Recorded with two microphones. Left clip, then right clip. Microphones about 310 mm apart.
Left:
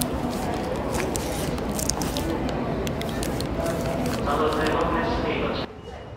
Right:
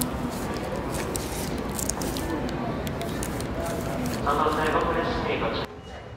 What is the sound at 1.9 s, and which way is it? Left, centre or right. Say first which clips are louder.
Spray: left 1 dB; centre.